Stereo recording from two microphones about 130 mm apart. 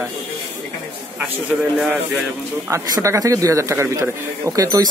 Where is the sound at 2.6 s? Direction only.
20° right (ahead or behind).